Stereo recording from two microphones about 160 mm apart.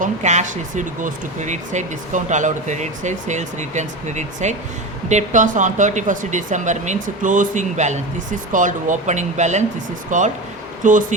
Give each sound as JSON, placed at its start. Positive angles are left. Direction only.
{"t": 0.0, "sound": "speech", "side_deg": -45}